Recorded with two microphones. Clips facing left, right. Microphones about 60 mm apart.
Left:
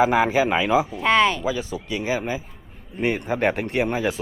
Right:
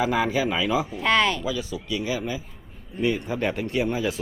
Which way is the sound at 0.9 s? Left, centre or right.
Centre.